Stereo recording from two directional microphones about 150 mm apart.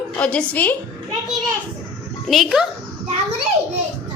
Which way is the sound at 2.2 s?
Centre (ahead or behind).